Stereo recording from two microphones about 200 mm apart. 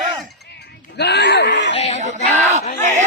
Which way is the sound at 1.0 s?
55° left (ahead or behind).